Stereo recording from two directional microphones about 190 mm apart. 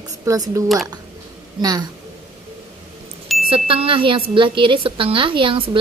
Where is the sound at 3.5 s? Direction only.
30° right (ahead or behind).